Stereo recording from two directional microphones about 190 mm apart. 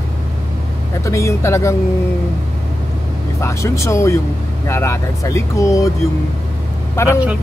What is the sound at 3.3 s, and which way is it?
Speech, 15° left (ahead or behind).